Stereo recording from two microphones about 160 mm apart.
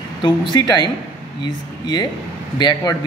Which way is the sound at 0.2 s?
25° left (ahead or behind).